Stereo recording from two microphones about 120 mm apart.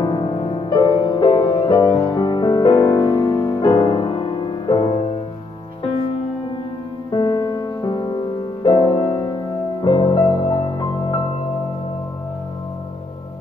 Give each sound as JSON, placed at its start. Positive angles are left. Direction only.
{"t": 0.0, "sound": "music", "side_deg": 40}
{"t": 3.6, "sound": "music", "side_deg": 45}
{"t": 7.1, "sound": "music", "side_deg": 40}